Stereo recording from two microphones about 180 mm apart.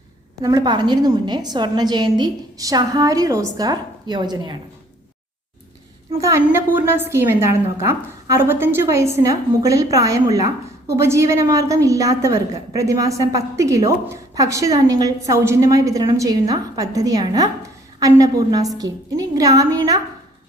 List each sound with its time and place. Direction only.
0.4 s a woman's voice: 20° right (ahead or behind)
6.1 s a woman's voice: 15° right (ahead or behind)